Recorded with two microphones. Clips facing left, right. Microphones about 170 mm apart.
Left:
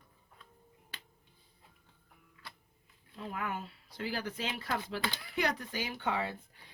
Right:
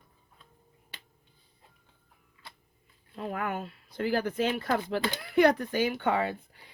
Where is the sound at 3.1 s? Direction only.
60° right (ahead or behind).